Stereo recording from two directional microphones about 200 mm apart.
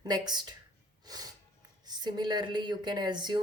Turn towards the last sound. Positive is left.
turn(degrees=-20)  # may be behind; listen again after turning